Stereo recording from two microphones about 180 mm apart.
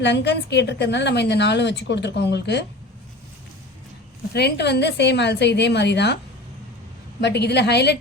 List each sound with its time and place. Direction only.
0.0 s a woman's voice: 75° left (ahead or behind)
4.4 s a woman's voice: 65° left (ahead or behind)
7.2 s a woman's voice: 70° left (ahead or behind)